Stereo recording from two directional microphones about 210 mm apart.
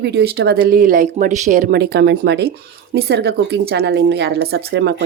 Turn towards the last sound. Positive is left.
turn(degrees=-50)  # may be behind; listen again after turning